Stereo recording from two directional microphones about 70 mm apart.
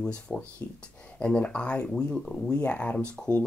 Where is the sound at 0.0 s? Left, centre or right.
Centre.